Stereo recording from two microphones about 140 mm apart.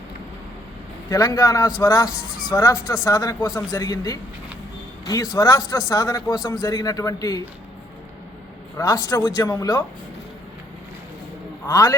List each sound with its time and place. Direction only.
1.1 s a man's voice: 20° left (ahead or behind)
8.8 s a man's voice: 25° left (ahead or behind)
11.7 s a man's voice: 20° left (ahead or behind)